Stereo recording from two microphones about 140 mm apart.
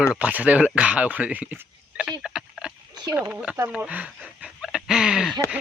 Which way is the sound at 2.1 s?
5° right (ahead or behind).